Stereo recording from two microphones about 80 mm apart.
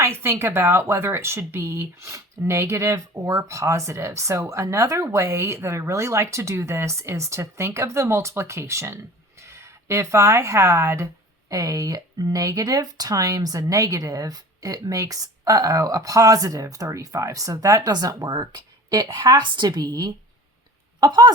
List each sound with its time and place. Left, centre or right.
0.0 s speech: right
19.3 s a woman's voice: right